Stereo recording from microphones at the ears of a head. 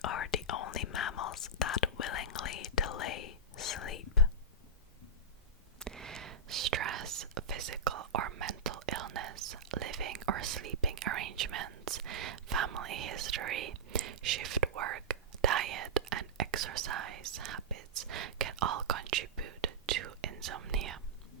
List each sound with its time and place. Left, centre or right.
0.0 s whispering: left
6.1 s whispering: right